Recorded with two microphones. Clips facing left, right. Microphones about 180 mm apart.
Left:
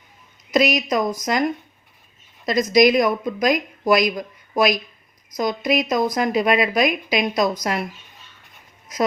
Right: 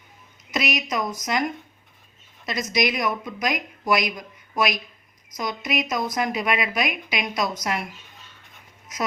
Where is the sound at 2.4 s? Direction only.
35° left (ahead or behind).